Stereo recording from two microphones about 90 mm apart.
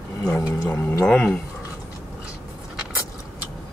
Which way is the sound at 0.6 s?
25° left (ahead or behind).